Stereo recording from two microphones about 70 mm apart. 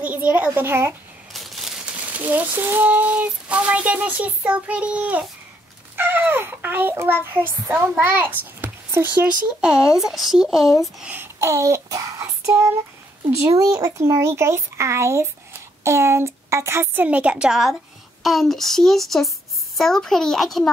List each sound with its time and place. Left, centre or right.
0.0 s a child's voice: right
1.3 s crumpling: centre
2.0 s child singing: right
5.9 s a child's voice: right
8.0 s a child's voice: right
9.7 s a woman's voice: centre
11.3 s child singing: right
13.3 s a child's voice: right
14.0 s a child's voice: right
17.1 s a woman's voice: centre